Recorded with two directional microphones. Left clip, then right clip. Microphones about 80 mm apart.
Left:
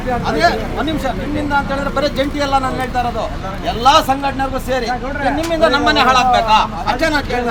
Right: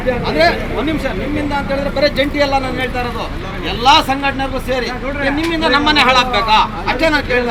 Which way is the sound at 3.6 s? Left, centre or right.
Left.